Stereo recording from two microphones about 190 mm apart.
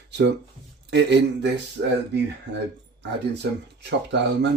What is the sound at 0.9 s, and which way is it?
Speech, 65° right (ahead or behind).